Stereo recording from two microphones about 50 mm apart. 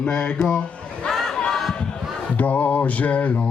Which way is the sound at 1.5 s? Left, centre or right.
Centre.